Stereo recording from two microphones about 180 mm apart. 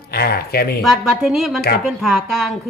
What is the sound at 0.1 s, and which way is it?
Speech, 60° left (ahead or behind).